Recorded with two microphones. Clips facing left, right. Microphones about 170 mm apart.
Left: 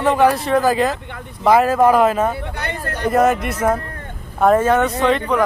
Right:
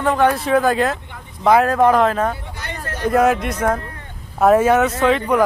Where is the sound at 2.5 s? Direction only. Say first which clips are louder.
Left 4 dB; 65° left (ahead or behind).